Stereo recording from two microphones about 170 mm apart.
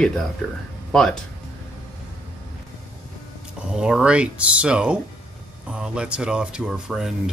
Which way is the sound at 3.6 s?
5° right (ahead or behind).